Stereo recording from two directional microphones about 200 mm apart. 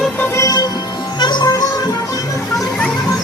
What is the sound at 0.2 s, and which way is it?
Music, 15° left (ahead or behind).